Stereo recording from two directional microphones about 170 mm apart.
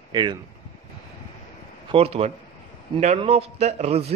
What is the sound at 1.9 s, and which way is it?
A man's voice, 35° right (ahead or behind).